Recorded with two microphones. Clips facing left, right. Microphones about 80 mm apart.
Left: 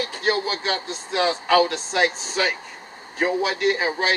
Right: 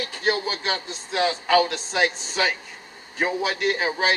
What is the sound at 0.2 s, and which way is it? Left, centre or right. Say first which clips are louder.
A man's voice: left 1 dB; centre.